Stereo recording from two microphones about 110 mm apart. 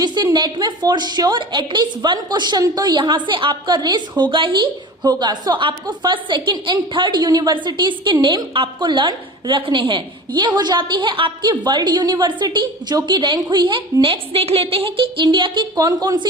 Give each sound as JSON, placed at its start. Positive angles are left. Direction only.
{"t": 0.0, "sound": "a woman's voice", "side_deg": -40}
{"t": 15.7, "sound": "a woman's voice", "side_deg": -35}